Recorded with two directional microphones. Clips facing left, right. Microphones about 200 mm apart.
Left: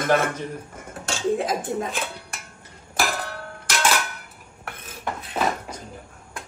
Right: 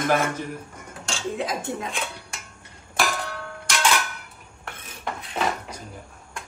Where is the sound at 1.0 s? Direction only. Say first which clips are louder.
Left 5 dB; 50° left (ahead or behind).